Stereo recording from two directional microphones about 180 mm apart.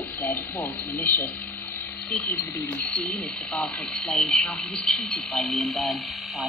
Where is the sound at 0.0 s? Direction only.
10° left (ahead or behind).